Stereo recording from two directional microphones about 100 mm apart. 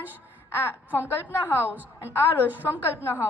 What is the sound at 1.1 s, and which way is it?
Speech, 20° left (ahead or behind).